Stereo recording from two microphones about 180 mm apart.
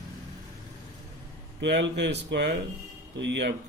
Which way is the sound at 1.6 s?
75° right (ahead or behind).